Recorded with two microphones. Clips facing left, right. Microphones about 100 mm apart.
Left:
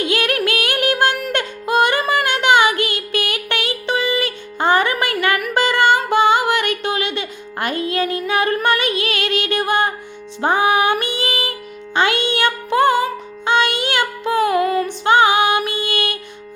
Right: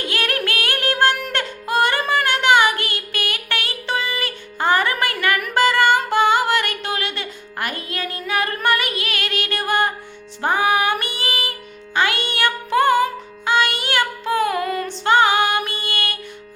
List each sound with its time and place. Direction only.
0.0 s music: 20° left (ahead or behind)
10.4 s female singing: 20° left (ahead or behind)
11.9 s music: 20° left (ahead or behind)